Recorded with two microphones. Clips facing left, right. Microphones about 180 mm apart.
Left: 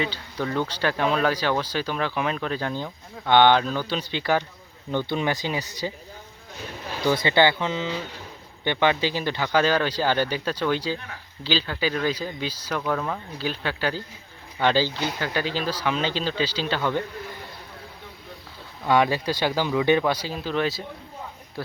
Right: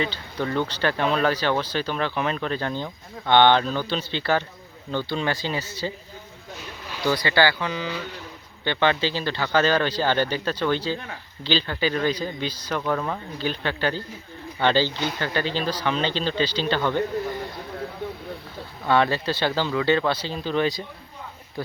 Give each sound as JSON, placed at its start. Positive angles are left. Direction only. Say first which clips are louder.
{"t": 0.0, "sound": "speech", "louder": "right 1 dB", "side_deg": 5}
{"t": 7.0, "sound": "speech", "louder": "left 1 dB", "side_deg": 20}
{"t": 18.9, "sound": "speech", "louder": "even", "side_deg": 10}